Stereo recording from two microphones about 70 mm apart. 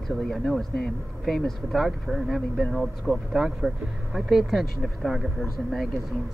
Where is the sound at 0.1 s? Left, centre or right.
Centre.